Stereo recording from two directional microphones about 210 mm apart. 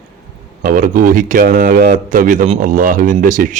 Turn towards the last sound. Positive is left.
turn(degrees=-40)  # may be behind; listen again after turning